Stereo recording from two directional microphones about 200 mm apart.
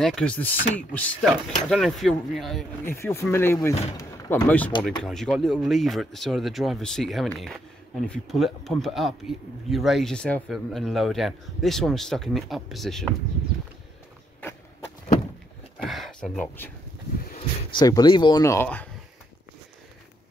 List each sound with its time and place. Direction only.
0.0 s speech: 5° left (ahead or behind)
2.8 s speech: 10° left (ahead or behind)
15.8 s speech: centre (ahead or behind)
17.4 s speech: 20° left (ahead or behind)